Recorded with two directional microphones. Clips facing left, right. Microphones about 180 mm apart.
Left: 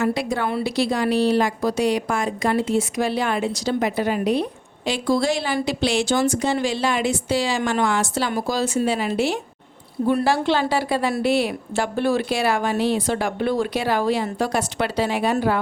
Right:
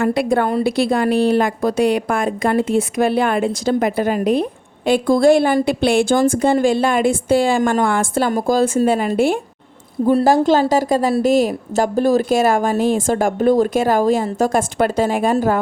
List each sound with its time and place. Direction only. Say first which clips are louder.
0.0 s a woman's voice: right 6 dB; 55° right (ahead or behind)
10.1 s a woman's voice: right 6 dB; 40° right (ahead or behind)